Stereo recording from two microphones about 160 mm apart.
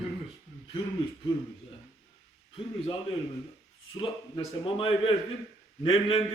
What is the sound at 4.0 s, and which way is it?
A man's voice, 35° left (ahead or behind).